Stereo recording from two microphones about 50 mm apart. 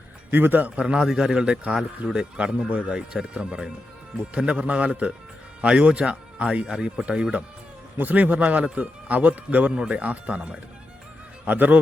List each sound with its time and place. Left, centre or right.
0.3 s speech: right
0.8 s a man's voice: centre
7.9 s speech: right